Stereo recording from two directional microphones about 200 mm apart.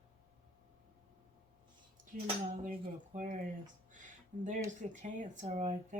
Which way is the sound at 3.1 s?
40° right (ahead or behind).